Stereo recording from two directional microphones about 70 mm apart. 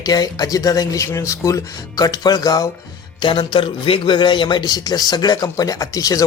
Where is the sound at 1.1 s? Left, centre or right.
Left.